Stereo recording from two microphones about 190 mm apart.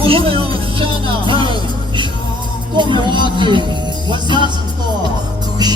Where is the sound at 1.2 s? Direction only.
25° right (ahead or behind).